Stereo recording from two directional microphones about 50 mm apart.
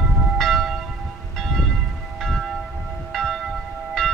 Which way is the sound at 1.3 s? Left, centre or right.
Centre.